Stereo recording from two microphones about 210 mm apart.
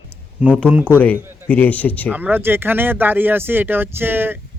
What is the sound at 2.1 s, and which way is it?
Speech, 10° right (ahead or behind).